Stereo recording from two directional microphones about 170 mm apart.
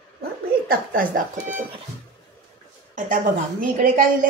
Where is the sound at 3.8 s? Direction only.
55° right (ahead or behind).